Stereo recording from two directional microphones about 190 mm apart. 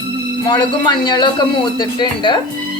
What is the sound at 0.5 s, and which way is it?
A woman's voice, 20° left (ahead or behind).